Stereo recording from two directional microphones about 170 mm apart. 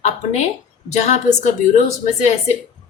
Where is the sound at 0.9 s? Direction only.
45° left (ahead or behind).